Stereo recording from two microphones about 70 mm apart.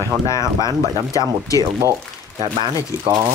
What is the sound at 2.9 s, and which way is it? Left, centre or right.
Speech, right.